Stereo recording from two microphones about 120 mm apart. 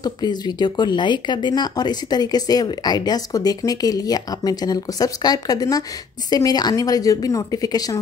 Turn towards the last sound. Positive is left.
turn(degrees=30)  # may be behind; listen again after turning